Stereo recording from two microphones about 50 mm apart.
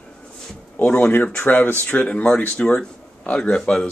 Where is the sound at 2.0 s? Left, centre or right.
Left.